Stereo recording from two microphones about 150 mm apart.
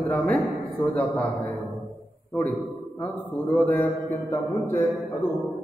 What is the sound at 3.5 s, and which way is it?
Speech, 10° left (ahead or behind).